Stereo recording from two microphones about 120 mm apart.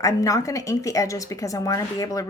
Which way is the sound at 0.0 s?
30° left (ahead or behind).